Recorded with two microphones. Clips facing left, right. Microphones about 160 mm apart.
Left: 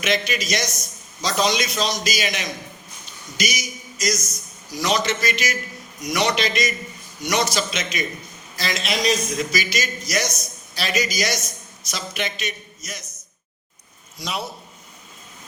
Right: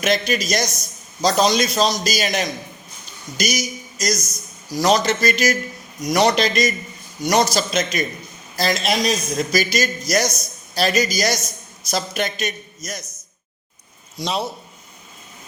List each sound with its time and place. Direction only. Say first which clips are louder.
0.0 s a man's voice: right 3 dB; 40° right (ahead or behind)
14.2 s a man's voice: right 5 dB; 25° right (ahead or behind)